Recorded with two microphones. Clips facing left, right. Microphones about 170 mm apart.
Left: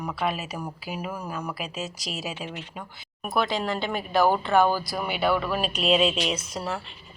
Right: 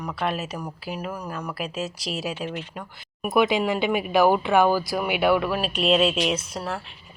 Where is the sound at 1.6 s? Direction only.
5° right (ahead or behind).